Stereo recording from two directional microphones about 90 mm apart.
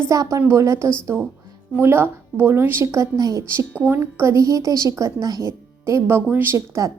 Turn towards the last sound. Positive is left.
turn(degrees=-35)  # may be behind; listen again after turning